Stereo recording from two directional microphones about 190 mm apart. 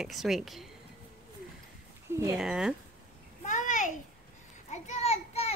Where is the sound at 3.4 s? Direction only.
40° left (ahead or behind).